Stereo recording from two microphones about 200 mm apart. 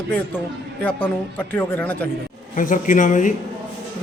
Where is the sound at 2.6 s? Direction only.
40° left (ahead or behind).